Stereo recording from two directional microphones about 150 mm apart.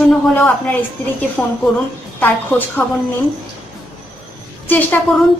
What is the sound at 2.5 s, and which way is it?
Speech, 15° left (ahead or behind).